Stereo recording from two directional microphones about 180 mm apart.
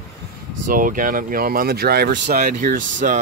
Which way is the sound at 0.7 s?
50° right (ahead or behind).